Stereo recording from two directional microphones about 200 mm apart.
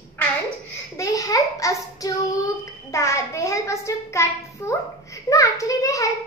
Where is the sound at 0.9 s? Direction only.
15° left (ahead or behind).